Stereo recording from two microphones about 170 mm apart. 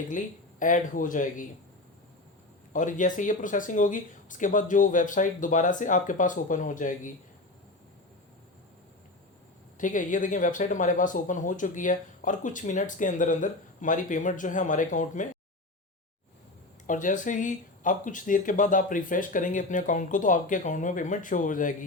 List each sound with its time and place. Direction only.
0.6 s speech: 50° left (ahead or behind)
2.7 s speech: 50° left (ahead or behind)
9.7 s speech: 50° left (ahead or behind)
16.8 s speech: 50° left (ahead or behind)